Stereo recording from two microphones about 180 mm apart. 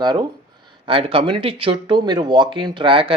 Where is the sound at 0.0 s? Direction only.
25° right (ahead or behind).